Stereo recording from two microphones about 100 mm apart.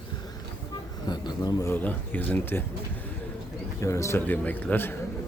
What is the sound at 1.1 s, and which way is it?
Speech, 45° left (ahead or behind).